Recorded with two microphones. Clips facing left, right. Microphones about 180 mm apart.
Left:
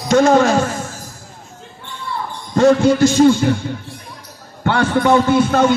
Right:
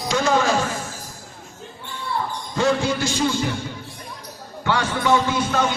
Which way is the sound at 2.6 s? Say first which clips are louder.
Left 10 dB; 45° left (ahead or behind).